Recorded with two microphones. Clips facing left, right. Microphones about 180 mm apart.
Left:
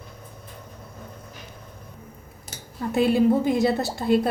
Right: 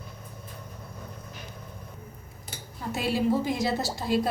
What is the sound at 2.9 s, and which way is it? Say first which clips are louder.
A woman's voice: left 7 dB; 55° left (ahead or behind).